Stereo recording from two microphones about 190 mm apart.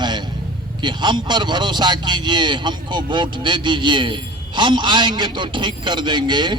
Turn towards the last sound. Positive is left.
turn(degrees=-25)  # may be behind; listen again after turning